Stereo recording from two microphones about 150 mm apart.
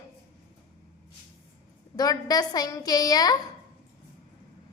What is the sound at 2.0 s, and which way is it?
A woman's voice, 25° left (ahead or behind).